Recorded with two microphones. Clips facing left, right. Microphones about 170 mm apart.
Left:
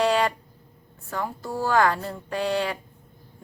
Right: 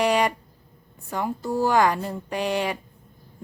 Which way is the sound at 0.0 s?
15° right (ahead or behind).